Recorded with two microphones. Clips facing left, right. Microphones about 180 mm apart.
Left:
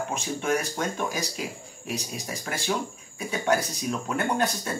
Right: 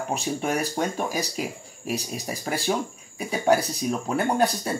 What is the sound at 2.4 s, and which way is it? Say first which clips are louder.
Speech: right 3 dB; 35° right (ahead or behind).